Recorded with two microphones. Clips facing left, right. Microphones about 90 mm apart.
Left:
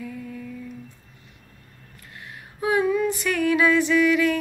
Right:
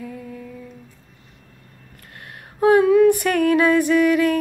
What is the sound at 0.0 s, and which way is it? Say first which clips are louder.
Humming: right 1 dB; 25° right (ahead or behind).